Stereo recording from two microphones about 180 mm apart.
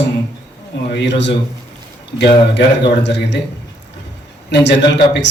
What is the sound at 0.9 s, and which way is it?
Speech, 75° left (ahead or behind).